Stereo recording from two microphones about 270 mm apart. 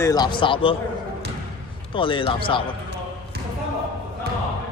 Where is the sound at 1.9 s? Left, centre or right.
Centre.